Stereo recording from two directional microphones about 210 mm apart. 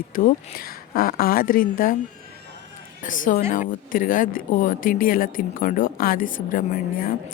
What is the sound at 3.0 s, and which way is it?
A woman's voice, 40° left (ahead or behind).